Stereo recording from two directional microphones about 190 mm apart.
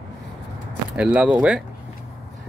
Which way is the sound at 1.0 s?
5° right (ahead or behind).